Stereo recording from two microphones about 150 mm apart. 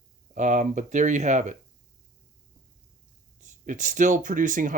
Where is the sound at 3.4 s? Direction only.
55° right (ahead or behind).